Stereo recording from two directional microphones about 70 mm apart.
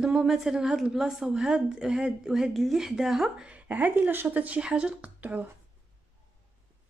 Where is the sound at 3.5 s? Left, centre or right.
Right.